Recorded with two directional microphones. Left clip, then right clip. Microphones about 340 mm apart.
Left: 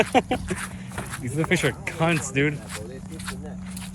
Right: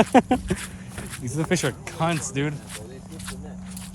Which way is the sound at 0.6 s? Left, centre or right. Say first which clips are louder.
Left 3 dB; centre.